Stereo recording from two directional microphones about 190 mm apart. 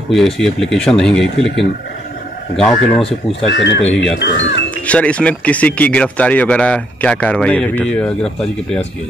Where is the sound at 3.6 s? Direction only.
70° left (ahead or behind).